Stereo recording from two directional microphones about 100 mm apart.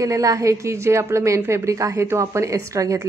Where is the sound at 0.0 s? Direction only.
35° right (ahead or behind).